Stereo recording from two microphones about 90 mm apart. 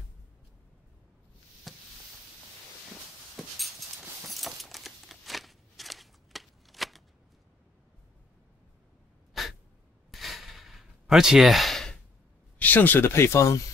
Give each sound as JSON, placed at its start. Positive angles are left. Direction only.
{"t": 1.7, "sound": "a sound", "side_deg": 0}
{"t": 3.4, "sound": "dog", "side_deg": 0}
{"t": 4.3, "sound": "a sound", "side_deg": 0}
{"t": 9.3, "sound": "sneeze", "side_deg": 0}
{"t": 10.1, "sound": "sigh", "side_deg": 0}
{"t": 12.5, "sound": "speech", "side_deg": 20}